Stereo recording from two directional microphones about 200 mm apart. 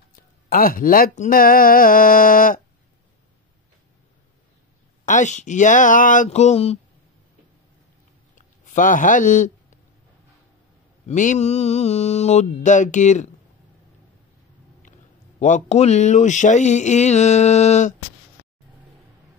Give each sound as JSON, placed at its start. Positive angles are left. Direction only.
{"t": 0.1, "sound": "speech", "side_deg": 45}
{"t": 5.0, "sound": "mantra", "side_deg": 40}
{"t": 8.4, "sound": "a sound", "side_deg": 40}
{"t": 11.1, "sound": "mantra", "side_deg": 35}
{"t": 14.8, "sound": "speech", "side_deg": 40}